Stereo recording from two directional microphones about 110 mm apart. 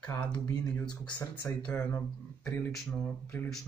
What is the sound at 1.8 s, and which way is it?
Speech, 25° left (ahead or behind).